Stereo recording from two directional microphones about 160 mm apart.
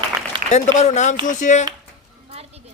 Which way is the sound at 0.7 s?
45° left (ahead or behind).